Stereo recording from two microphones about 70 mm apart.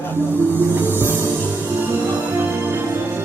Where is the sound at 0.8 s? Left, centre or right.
Right.